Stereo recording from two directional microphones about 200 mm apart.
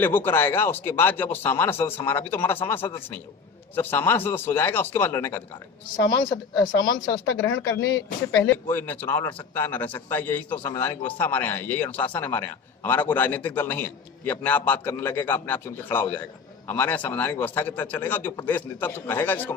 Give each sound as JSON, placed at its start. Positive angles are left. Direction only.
{"t": 0.0, "sound": "a man's voice", "side_deg": 10}
{"t": 6.9, "sound": "speech", "side_deg": 70}
{"t": 8.6, "sound": "a man's voice", "side_deg": 10}